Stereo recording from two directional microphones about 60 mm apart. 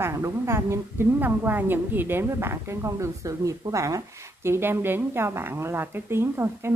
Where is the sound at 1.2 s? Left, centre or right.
Right.